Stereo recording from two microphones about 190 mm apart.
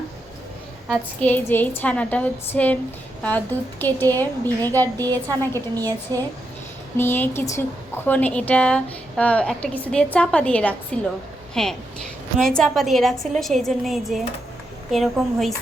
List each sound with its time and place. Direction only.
0.9 s a woman's voice: 10° left (ahead or behind)
6.1 s speech: 20° right (ahead or behind)
6.9 s a woman's voice: 10° left (ahead or behind)